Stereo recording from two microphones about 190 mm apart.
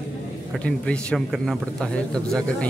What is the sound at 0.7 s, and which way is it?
Speech, 5° left (ahead or behind).